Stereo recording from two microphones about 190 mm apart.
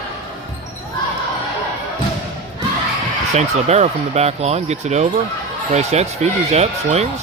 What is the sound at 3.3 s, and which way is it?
Speech, 35° right (ahead or behind).